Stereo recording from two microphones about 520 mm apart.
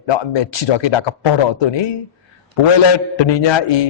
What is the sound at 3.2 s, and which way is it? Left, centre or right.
Speech, left.